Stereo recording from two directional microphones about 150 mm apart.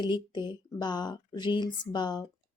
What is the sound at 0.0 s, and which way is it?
Speech, 30° left (ahead or behind).